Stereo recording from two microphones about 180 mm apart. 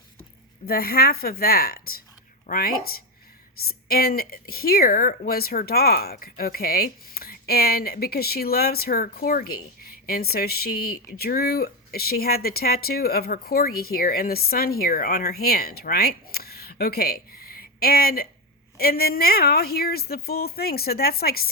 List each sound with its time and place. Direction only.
0.6 s speech: 55° left (ahead or behind)